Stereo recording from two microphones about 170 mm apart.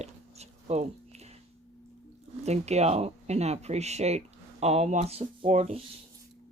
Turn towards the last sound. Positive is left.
turn(degrees=-40)  # may be behind; listen again after turning